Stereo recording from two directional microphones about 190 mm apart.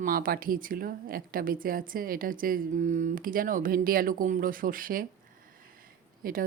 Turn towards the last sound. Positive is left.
turn(degrees=-50)  # may be behind; listen again after turning